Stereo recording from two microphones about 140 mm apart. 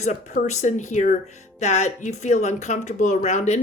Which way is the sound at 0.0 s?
60° left (ahead or behind).